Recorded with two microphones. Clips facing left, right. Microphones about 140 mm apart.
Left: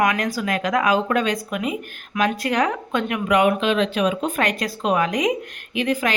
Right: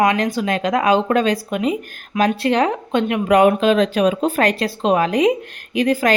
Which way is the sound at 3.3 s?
40° right (ahead or behind).